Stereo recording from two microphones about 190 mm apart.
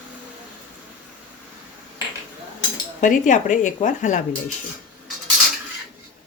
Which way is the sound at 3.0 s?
40° left (ahead or behind).